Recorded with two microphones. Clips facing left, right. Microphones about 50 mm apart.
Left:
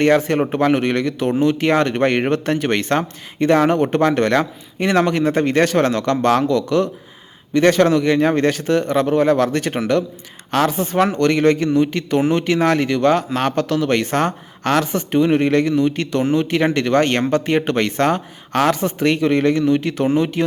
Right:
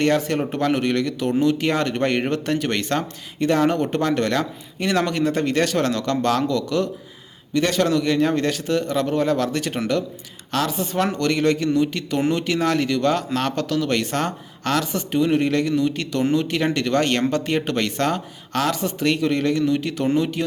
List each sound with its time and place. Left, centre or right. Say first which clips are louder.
0.0 s a man's voice: left 5 dB; left